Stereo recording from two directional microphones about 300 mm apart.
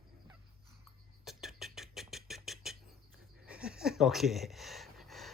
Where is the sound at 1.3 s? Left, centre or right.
Centre.